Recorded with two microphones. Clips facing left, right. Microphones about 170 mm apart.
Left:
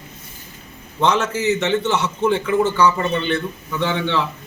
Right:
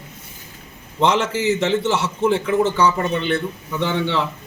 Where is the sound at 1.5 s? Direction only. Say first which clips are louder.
Even; 30° right (ahead or behind).